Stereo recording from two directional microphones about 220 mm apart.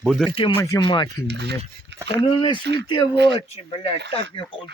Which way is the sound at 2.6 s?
50° right (ahead or behind).